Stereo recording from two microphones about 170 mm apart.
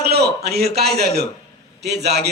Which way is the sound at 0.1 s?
70° right (ahead or behind).